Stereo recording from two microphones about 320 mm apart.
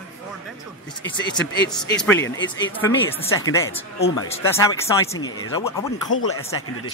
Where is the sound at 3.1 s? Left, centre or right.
Centre.